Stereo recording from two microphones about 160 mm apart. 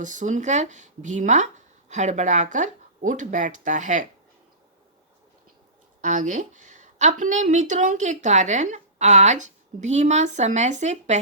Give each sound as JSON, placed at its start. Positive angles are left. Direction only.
{"t": 0.0, "sound": "a woman's voice", "side_deg": -50}
{"t": 6.0, "sound": "a woman's voice", "side_deg": -50}